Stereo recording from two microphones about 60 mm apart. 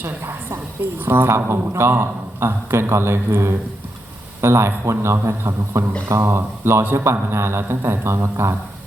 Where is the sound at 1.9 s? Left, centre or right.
Right.